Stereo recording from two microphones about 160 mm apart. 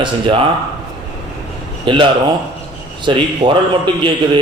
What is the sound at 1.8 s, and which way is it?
A man's voice, 30° right (ahead or behind).